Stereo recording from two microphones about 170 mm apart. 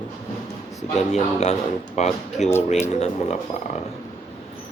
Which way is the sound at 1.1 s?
40° left (ahead or behind).